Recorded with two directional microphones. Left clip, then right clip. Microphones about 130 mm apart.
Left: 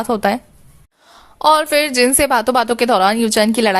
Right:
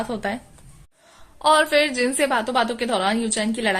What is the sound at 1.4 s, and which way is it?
A woman's voice, 50° left (ahead or behind).